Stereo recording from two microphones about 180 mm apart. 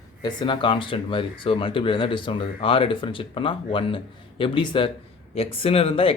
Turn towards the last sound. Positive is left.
turn(degrees=30)  # may be behind; listen again after turning